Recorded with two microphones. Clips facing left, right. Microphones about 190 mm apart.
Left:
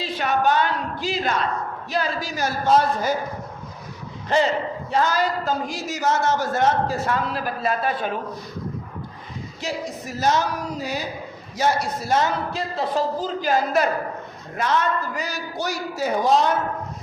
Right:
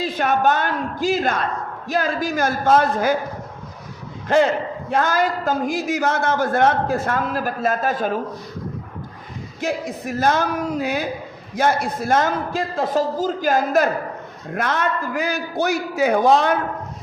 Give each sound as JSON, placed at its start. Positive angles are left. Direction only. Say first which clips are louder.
{"t": 0.0, "sound": "a man's voice", "louder": "right 3 dB", "side_deg": -50}
{"t": 4.3, "sound": "a man's voice", "louder": "right 3 dB", "side_deg": -55}
{"t": 9.6, "sound": "a man's voice", "louder": "right 5 dB", "side_deg": -55}
{"t": 14.5, "sound": "a man's voice", "louder": "even", "side_deg": -60}